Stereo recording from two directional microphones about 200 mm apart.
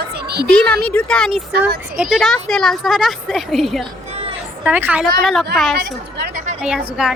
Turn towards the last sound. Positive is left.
turn(degrees=-5)  # may be behind; listen again after turning